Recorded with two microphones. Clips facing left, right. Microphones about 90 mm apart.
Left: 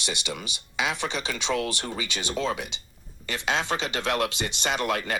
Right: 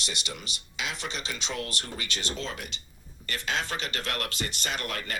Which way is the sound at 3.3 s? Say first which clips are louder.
Left 4 dB; 90° left.